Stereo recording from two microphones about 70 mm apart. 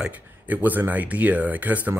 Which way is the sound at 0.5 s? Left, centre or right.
Right.